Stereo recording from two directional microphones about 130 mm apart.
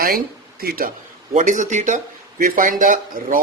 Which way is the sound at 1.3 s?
70° right (ahead or behind).